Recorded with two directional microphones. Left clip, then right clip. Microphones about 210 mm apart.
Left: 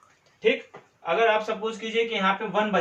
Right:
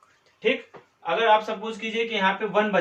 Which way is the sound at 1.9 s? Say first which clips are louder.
Even; 10° left (ahead or behind).